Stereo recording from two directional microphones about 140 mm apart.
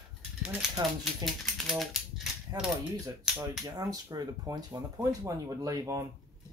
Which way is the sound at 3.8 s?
25° right (ahead or behind).